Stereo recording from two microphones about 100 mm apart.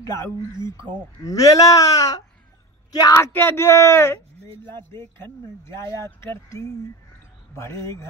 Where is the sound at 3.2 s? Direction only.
20° left (ahead or behind).